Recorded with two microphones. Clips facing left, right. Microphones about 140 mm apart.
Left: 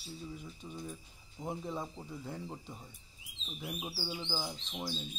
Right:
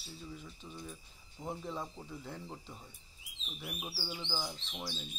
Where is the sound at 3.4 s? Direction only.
20° left (ahead or behind).